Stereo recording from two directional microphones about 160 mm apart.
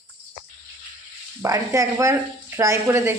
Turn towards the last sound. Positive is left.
turn(degrees=-15)  # may be behind; listen again after turning